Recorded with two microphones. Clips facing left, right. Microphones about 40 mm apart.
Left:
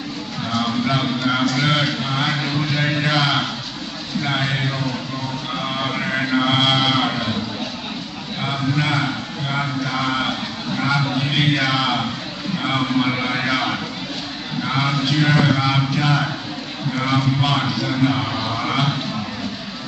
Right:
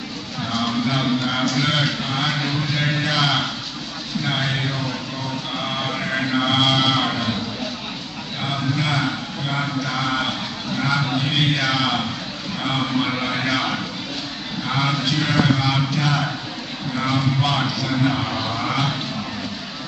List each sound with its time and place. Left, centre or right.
0.5 s speech: centre
5.6 s livestock: centre
8.5 s a man's voice: centre